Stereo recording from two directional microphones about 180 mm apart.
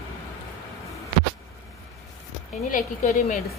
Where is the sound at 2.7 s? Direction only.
45° left (ahead or behind).